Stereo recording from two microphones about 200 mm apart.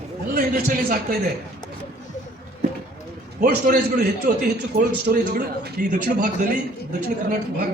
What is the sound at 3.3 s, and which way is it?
Speech, 45° right (ahead or behind).